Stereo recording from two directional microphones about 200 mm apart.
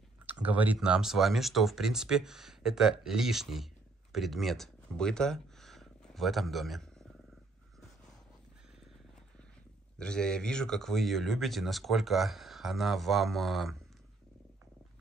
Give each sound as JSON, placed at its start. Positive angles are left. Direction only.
{"t": 0.3, "sound": "speech", "side_deg": -10}
{"t": 9.9, "sound": "speech", "side_deg": 5}